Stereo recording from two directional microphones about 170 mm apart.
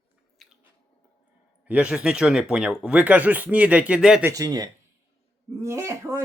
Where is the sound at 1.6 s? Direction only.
5° right (ahead or behind).